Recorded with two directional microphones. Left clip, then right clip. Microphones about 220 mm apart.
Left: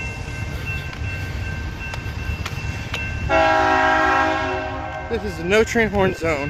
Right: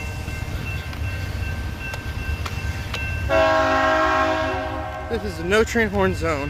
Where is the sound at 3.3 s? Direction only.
30° right (ahead or behind).